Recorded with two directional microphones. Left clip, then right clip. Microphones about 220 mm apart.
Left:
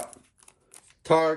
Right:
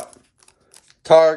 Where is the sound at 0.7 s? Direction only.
10° right (ahead or behind).